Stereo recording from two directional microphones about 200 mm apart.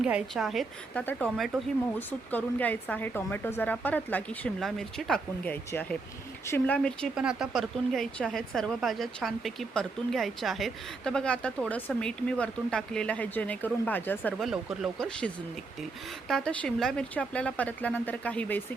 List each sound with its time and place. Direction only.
0.0 s speech: 5° right (ahead or behind)
16.3 s speech: 5° left (ahead or behind)